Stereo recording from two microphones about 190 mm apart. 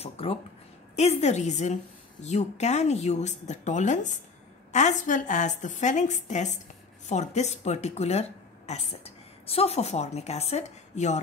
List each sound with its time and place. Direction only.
0.0 s speech: 30° left (ahead or behind)